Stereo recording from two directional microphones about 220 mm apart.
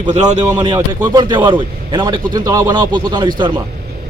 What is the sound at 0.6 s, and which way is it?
A man's voice, 20° right (ahead or behind).